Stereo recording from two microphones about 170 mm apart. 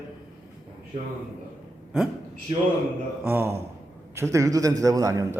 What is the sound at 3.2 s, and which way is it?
A man's voice, 10° right (ahead or behind).